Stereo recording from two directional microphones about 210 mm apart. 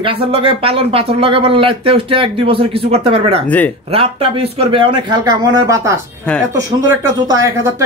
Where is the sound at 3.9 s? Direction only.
25° right (ahead or behind).